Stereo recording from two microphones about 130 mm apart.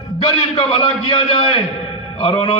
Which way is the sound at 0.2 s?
50° left (ahead or behind).